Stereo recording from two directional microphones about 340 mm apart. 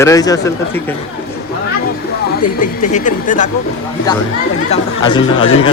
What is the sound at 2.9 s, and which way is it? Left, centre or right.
Speech, left.